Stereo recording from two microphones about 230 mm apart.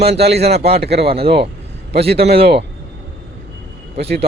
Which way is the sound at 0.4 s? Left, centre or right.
Right.